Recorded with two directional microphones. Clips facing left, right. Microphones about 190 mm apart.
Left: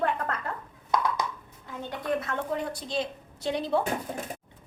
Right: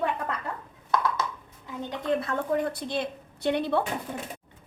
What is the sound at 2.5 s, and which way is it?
A woman's voice, 55° right (ahead or behind).